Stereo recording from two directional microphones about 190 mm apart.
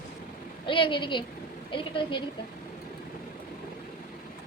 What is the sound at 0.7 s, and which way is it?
A woman's voice, 25° left (ahead or behind).